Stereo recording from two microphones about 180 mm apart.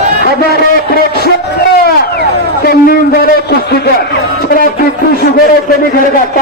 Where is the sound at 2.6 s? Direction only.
55° left (ahead or behind).